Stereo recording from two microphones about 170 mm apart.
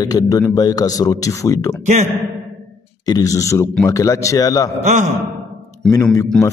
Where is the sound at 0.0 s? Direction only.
20° left (ahead or behind).